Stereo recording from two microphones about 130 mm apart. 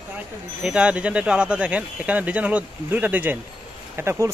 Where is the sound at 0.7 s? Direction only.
10° right (ahead or behind).